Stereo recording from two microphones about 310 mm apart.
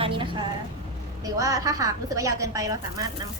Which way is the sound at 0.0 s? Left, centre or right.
Centre.